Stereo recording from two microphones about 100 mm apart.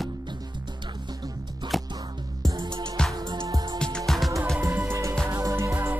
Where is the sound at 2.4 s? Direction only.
45° right (ahead or behind).